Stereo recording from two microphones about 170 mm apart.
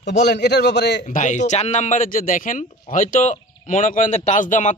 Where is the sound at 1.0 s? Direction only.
45° left (ahead or behind).